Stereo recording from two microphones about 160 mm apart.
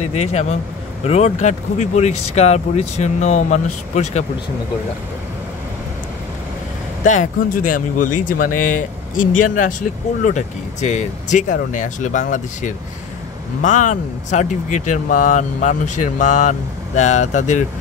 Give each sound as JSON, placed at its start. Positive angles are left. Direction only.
{"t": 0.0, "sound": "speech", "side_deg": 45}
{"t": 7.0, "sound": "speech", "side_deg": 50}